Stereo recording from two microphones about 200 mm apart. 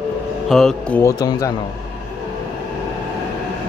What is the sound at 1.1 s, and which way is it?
Speech, 20° left (ahead or behind).